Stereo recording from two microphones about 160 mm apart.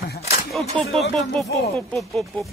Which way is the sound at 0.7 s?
40° right (ahead or behind).